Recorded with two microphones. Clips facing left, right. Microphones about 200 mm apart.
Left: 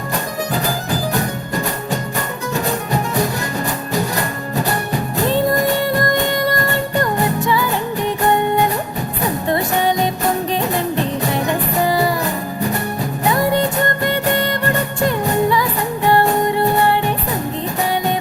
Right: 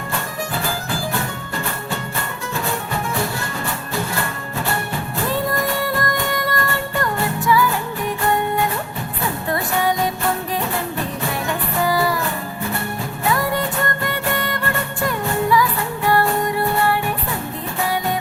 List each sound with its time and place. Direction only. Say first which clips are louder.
0.5 s music: left 4 dB; 40° left (ahead or behind)
4.7 s music: left 4 dB; 20° left (ahead or behind)
12.2 s music: left 4 dB; 40° left (ahead or behind)
13.2 s music: left 4 dB; 20° left (ahead or behind)